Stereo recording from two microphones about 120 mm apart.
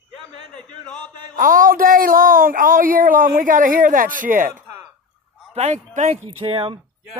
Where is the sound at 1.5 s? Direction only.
90° right.